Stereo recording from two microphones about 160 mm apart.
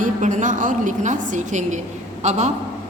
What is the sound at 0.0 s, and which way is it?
A woman's voice, 50° right (ahead or behind).